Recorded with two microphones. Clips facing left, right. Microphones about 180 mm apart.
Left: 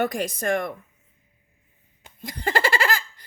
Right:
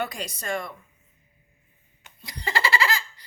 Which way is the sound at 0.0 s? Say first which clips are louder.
Left 7 dB; 50° left (ahead or behind).